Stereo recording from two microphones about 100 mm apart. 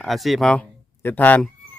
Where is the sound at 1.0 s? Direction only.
15° left (ahead or behind).